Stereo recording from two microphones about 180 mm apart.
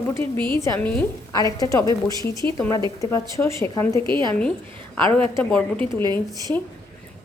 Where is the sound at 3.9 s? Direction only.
25° right (ahead or behind).